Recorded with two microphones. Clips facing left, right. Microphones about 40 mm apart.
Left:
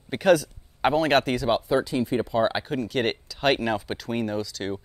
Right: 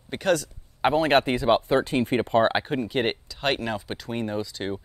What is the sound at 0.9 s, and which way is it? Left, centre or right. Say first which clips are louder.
Speech: right 1 dB; centre.